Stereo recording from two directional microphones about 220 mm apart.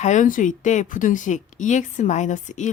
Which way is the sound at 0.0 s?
35° left (ahead or behind).